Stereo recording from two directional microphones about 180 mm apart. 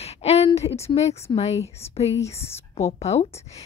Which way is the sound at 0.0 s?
35° left (ahead or behind).